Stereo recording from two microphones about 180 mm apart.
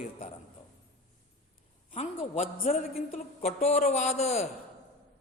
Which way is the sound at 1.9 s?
40° left (ahead or behind).